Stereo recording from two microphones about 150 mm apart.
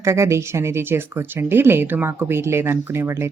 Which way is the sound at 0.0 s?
20° right (ahead or behind).